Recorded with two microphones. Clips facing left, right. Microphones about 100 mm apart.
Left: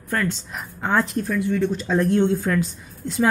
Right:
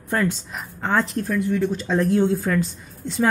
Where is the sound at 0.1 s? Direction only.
15° right (ahead or behind).